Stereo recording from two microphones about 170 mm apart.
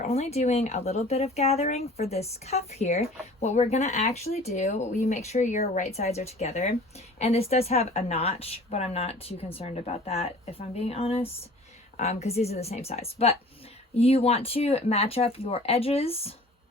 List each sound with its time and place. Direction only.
0.0 s speech: 40° left (ahead or behind)